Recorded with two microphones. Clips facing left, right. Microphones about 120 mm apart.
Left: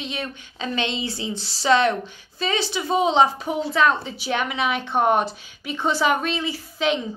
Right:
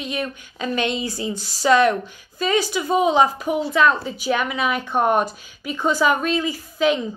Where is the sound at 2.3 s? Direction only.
45° right (ahead or behind).